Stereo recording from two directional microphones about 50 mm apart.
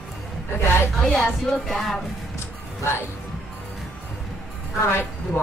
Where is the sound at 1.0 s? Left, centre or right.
Centre.